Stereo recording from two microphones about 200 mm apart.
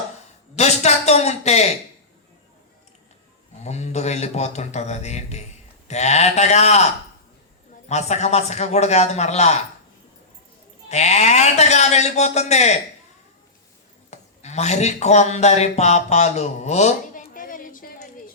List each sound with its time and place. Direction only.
0.5 s speech: 35° left (ahead or behind)
3.6 s speech: 35° left (ahead or behind)
7.9 s speech: 35° left (ahead or behind)
10.8 s speech: 35° left (ahead or behind)
14.1 s a man's voice: 35° left (ahead or behind)